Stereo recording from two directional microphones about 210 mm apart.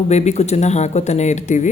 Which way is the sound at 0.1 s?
30° left (ahead or behind).